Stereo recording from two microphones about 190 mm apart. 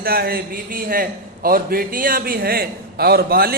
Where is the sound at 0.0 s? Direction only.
55° right (ahead or behind).